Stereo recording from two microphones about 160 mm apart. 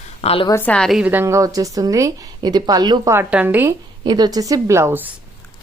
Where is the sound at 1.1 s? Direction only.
15° right (ahead or behind).